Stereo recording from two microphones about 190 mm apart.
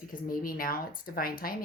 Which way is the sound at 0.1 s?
50° left (ahead or behind).